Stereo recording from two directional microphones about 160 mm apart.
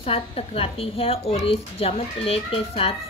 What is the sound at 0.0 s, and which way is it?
A woman's voice, 35° left (ahead or behind).